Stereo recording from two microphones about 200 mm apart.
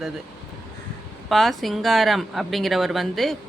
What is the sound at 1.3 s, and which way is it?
A woman's voice, centre (ahead or behind).